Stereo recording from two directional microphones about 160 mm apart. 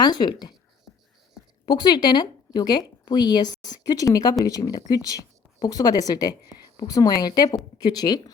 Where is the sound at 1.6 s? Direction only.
25° left (ahead or behind).